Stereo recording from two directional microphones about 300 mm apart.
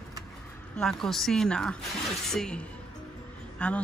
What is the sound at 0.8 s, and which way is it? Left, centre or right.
Speech, centre.